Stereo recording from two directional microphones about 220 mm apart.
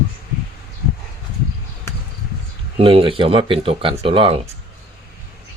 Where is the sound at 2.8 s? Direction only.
25° right (ahead or behind).